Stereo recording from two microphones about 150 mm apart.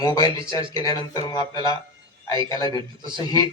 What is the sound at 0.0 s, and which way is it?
Speech, 25° left (ahead or behind).